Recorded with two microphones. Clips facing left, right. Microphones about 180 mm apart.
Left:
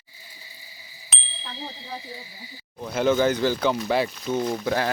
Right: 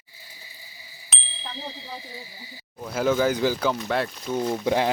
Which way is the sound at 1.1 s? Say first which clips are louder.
Even; centre (ahead or behind).